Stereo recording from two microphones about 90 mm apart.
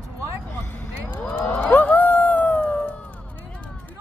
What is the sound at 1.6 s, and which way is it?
Dog, 20° left (ahead or behind).